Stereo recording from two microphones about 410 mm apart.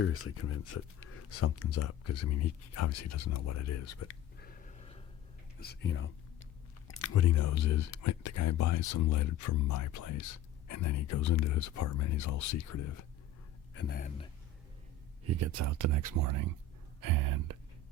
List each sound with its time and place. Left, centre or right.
0.0 s speech: left
4.4 s a sound: left
5.5 s speech: left
13.7 s speech: left
15.2 s speech: right